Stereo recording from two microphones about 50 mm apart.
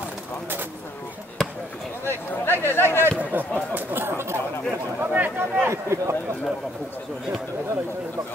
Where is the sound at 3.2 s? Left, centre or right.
Right.